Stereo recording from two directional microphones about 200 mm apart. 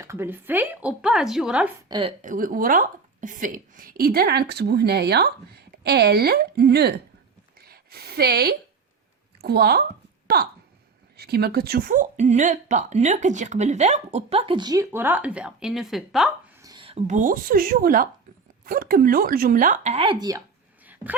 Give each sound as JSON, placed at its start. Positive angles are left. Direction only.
{"t": 0.0, "sound": "speech", "side_deg": -15}
{"t": 1.9, "sound": "a woman's voice", "side_deg": -25}
{"t": 2.2, "sound": "a woman's voice", "side_deg": -40}
{"t": 16.6, "sound": "a woman's voice", "side_deg": -25}
{"t": 20.8, "sound": "a sound", "side_deg": -10}